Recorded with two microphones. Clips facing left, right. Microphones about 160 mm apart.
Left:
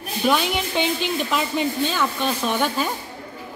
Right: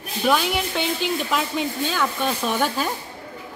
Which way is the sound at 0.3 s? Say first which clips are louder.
Right 1 dB; centre (ahead or behind).